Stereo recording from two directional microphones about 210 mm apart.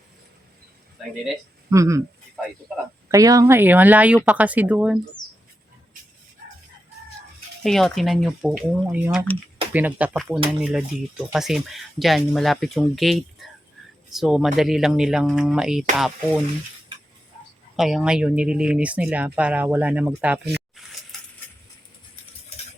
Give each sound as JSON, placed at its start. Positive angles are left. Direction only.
{"t": 1.7, "sound": "speech", "side_deg": -15}
{"t": 2.3, "sound": "speech", "side_deg": 0}
{"t": 3.1, "sound": "speech", "side_deg": -15}
{"t": 7.6, "sound": "speech", "side_deg": 0}
{"t": 17.7, "sound": "speech", "side_deg": 0}